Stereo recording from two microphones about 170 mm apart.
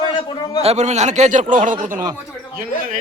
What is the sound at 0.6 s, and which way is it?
Speech, 40° right (ahead or behind).